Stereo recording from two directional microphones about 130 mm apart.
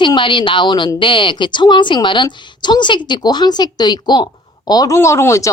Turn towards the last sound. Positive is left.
turn(degrees=20)  # may be behind; listen again after turning